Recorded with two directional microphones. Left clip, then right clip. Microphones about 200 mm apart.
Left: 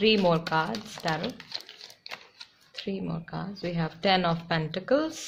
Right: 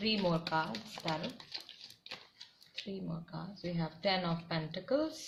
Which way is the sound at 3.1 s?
50° left (ahead or behind).